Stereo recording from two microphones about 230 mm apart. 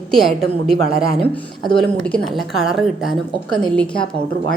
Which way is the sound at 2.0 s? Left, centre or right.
Centre.